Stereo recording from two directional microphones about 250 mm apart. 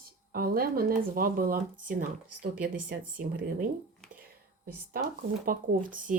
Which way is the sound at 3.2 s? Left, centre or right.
Right.